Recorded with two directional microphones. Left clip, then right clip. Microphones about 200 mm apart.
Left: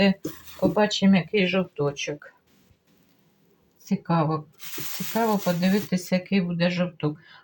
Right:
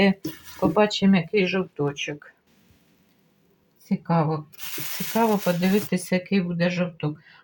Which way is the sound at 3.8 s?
5° right (ahead or behind).